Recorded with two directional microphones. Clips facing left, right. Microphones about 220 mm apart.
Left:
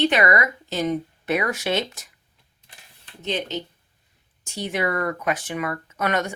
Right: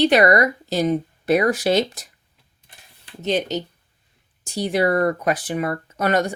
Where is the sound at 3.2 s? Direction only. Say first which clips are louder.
Right 5 dB; 40° right (ahead or behind).